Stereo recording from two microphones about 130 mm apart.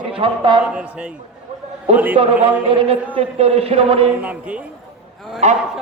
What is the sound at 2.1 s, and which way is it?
Speech, 50° right (ahead or behind).